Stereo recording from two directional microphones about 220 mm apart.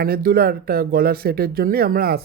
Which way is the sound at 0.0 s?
40° right (ahead or behind).